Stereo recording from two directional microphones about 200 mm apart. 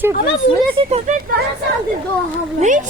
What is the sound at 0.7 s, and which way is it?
Speech, 30° right (ahead or behind).